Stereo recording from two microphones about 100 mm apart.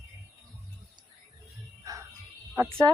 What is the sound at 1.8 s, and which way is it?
Music, 35° right (ahead or behind).